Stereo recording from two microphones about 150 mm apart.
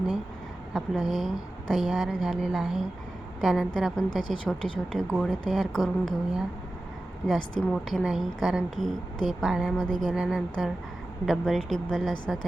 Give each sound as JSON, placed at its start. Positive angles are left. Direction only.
{"t": 0.7, "sound": "a woman's voice", "side_deg": 0}